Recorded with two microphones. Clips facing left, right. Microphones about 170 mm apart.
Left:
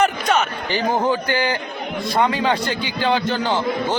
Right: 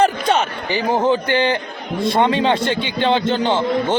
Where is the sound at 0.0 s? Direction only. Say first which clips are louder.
Right 2 dB; 30° right (ahead or behind).